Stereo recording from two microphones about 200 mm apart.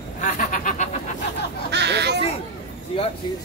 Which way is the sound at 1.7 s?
60° right (ahead or behind).